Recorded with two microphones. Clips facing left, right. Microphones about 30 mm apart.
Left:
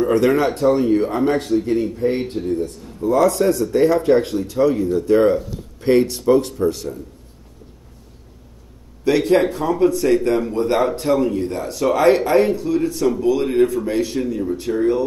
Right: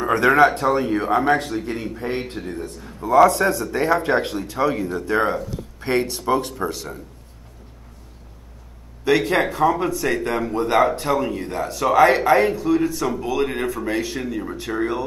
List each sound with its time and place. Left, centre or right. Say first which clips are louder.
0.0 s a man's voice: right 1 dB; centre
9.0 s a man's voice: left 3 dB; centre
14.7 s speech: left 3 dB; right